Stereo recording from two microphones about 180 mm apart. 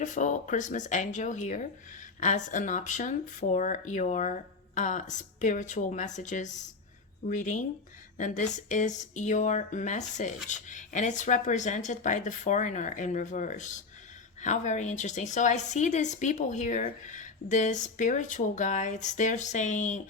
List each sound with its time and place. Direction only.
0.0 s speech: 45° left (ahead or behind)